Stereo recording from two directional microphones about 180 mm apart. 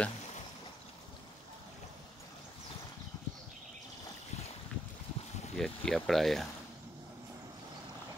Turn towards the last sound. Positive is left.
turn(degrees=0)  # may be behind; listen again after turning